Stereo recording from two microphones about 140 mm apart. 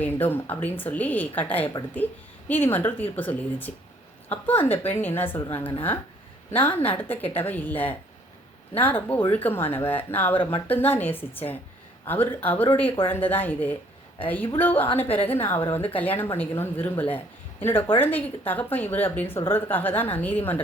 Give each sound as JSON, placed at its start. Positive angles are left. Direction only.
{"t": 0.0, "sound": "a woman's voice", "side_deg": 15}
{"t": 10.3, "sound": "speech", "side_deg": 35}
{"t": 10.7, "sound": "a woman's voice", "side_deg": 15}
{"t": 15.0, "sound": "a woman's voice", "side_deg": 40}
{"t": 15.3, "sound": "a woman's voice", "side_deg": 15}